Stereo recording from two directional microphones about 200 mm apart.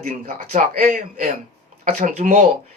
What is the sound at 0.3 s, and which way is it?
Speech, 45° right (ahead or behind).